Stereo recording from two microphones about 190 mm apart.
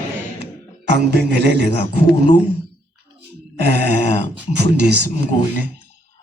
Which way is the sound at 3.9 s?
40° left (ahead or behind).